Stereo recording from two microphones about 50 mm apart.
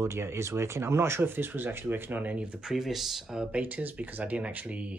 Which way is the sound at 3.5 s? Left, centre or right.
Right.